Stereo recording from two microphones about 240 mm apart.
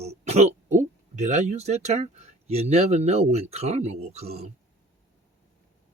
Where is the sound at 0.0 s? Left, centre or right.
Right.